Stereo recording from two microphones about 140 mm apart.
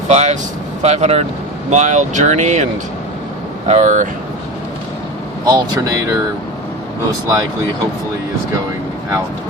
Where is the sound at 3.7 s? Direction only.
60° right (ahead or behind).